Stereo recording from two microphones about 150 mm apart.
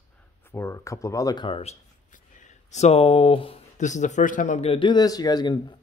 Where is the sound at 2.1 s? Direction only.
55° left (ahead or behind).